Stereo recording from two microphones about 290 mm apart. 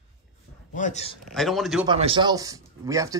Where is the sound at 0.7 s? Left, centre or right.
Left.